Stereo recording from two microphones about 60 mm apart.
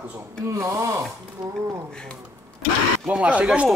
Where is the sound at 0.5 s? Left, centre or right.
Right.